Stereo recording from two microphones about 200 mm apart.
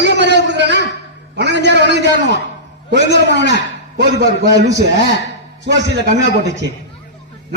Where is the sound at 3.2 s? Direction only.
60° left (ahead or behind).